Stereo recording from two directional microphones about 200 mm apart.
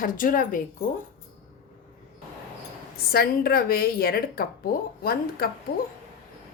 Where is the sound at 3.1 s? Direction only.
50° left (ahead or behind).